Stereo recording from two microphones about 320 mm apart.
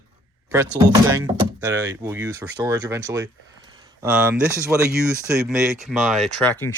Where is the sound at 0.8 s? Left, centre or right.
Centre.